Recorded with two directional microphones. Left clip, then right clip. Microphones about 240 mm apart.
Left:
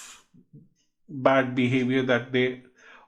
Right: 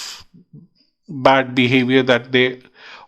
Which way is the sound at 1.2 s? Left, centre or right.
Right.